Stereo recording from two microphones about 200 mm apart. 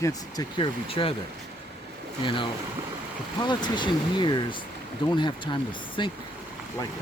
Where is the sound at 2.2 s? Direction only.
25° left (ahead or behind).